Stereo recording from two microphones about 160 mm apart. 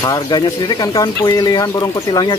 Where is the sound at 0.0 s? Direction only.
25° left (ahead or behind).